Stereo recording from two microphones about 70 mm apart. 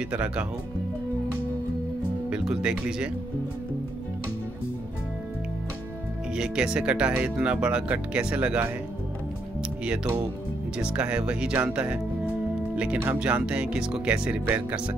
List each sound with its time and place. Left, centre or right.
0.1 s speech: centre
2.2 s speech: centre
6.3 s speech: centre
10.8 s speech: centre